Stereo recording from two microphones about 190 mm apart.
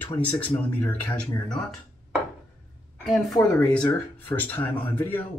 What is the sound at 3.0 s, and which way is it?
A man's voice, centre (ahead or behind).